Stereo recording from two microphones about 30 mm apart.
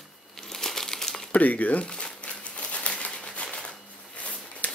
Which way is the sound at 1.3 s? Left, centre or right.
Left.